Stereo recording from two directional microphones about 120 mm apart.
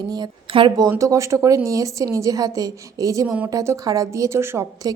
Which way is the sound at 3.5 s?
25° right (ahead or behind).